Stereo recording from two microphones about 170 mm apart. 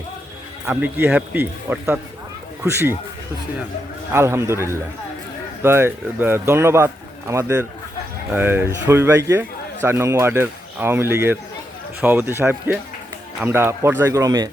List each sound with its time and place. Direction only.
0.7 s a man's voice: 15° right (ahead or behind)
4.1 s a man's voice: 15° right (ahead or behind)